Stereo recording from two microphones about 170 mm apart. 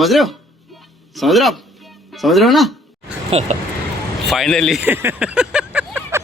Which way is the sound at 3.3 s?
40° right (ahead or behind).